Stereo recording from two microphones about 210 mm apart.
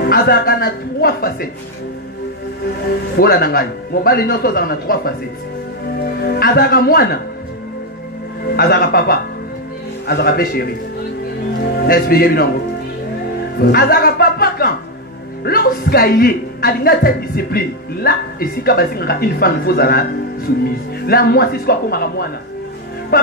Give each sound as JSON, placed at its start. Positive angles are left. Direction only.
{"t": 0.0, "sound": "a woman's voice", "side_deg": 45}
{"t": 3.2, "sound": "speech", "side_deg": 45}
{"t": 8.5, "sound": "speech", "side_deg": 45}
{"t": 13.6, "sound": "speech", "side_deg": 45}
{"t": 23.1, "sound": "speech", "side_deg": 45}